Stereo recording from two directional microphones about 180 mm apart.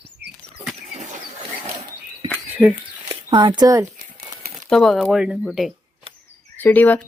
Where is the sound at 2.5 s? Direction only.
10° right (ahead or behind).